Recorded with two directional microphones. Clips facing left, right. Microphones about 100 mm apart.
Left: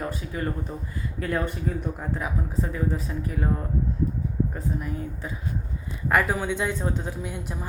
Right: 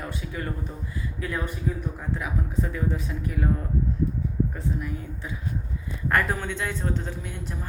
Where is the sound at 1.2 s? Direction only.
45° left (ahead or behind).